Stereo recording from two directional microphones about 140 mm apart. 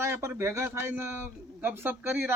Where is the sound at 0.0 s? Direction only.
20° right (ahead or behind).